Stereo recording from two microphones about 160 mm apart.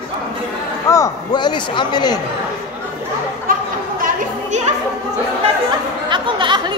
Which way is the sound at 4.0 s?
50° right (ahead or behind).